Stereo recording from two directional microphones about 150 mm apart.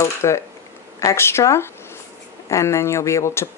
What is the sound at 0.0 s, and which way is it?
Speech, 20° left (ahead or behind).